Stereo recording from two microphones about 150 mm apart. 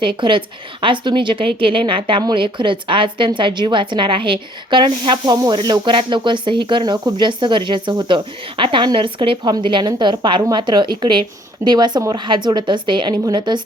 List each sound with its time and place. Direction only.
0.2 s a woman's voice: 35° right (ahead or behind)